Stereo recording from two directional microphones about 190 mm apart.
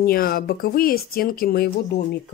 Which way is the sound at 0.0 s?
50° left (ahead or behind).